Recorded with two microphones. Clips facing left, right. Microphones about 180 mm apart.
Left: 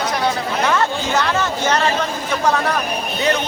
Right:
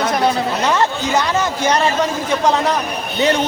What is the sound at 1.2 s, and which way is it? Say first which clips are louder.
Speech: right 1 dB; 15° right (ahead or behind).